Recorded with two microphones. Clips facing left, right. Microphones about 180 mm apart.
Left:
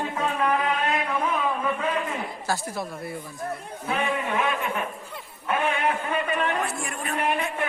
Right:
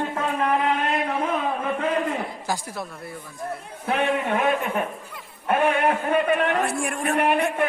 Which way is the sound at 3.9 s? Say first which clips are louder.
Right 4 dB; 65° right (ahead or behind).